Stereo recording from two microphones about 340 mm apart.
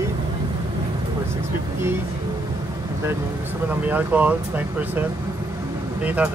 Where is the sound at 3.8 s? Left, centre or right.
Centre.